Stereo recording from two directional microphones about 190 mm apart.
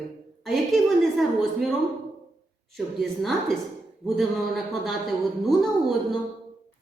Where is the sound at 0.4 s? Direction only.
Centre (ahead or behind).